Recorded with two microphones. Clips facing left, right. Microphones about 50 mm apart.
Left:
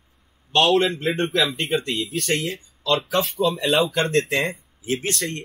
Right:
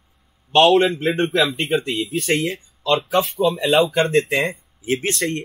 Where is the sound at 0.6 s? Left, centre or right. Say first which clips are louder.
Right 4 dB; centre.